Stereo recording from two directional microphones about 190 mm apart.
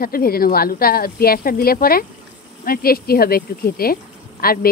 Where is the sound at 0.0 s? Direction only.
50° left (ahead or behind).